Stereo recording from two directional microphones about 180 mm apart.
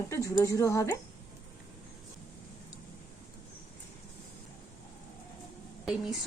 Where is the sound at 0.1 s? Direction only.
15° left (ahead or behind).